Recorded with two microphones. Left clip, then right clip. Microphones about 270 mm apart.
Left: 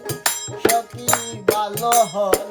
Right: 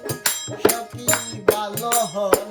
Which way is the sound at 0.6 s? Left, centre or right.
Centre.